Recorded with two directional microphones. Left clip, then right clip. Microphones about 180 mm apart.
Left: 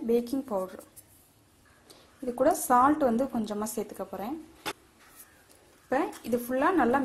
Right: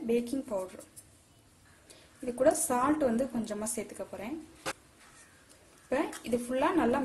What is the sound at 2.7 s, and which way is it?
A woman's voice, 15° left (ahead or behind).